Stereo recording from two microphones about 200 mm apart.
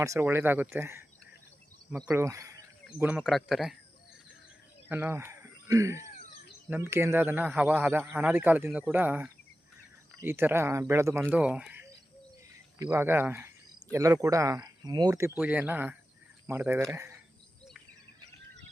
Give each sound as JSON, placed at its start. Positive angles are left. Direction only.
{"t": 0.0, "sound": "speech", "side_deg": -15}
{"t": 2.1, "sound": "speech", "side_deg": -15}
{"t": 4.9, "sound": "speech", "side_deg": -10}
{"t": 15.4, "sound": "speech", "side_deg": -10}